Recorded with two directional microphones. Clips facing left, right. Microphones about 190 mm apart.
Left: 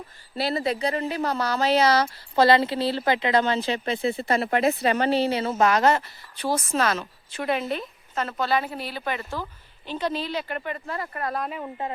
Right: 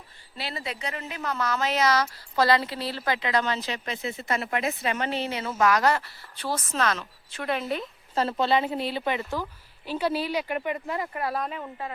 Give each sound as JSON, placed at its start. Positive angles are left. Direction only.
{"t": 0.3, "sound": "speech", "side_deg": 40}
{"t": 8.1, "sound": "a woman's voice", "side_deg": -30}